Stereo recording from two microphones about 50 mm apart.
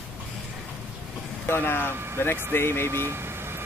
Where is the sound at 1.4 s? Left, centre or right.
Left.